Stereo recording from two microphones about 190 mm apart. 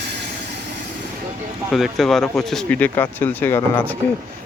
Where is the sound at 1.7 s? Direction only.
Centre (ahead or behind).